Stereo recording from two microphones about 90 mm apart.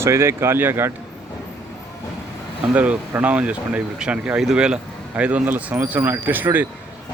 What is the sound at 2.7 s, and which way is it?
Speech, 15° right (ahead or behind).